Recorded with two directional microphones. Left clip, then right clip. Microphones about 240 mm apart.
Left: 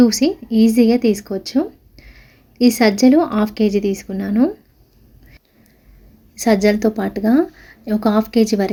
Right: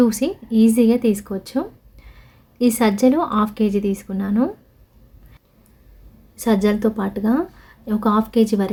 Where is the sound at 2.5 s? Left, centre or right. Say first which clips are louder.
Left 4 dB; centre.